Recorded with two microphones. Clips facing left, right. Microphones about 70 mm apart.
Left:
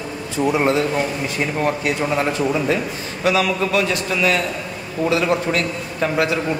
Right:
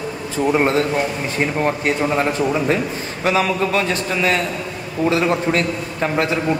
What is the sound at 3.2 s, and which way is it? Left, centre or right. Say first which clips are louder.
A man's voice: even; right.